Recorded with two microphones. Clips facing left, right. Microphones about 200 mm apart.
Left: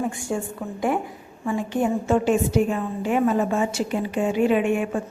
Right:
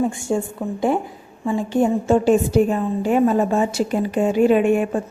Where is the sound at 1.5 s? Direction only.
30° right (ahead or behind).